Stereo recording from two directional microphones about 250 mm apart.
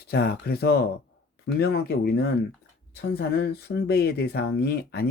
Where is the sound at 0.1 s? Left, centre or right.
Left.